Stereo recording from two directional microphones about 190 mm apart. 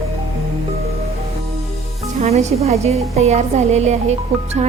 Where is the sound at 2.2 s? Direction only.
40° right (ahead or behind).